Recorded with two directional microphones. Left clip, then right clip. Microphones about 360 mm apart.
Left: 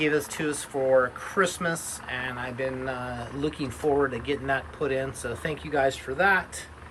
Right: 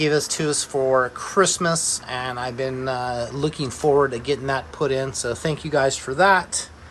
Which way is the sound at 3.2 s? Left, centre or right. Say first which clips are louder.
Right 6 dB; right.